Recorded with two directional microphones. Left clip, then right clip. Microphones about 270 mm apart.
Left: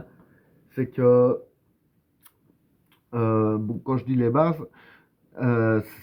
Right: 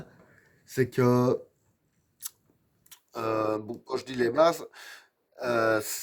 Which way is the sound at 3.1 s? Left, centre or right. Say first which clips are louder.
Left 4 dB; right.